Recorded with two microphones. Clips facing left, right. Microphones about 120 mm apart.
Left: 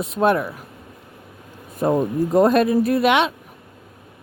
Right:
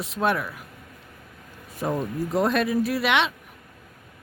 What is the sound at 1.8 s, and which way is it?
Speech, 40° left (ahead or behind).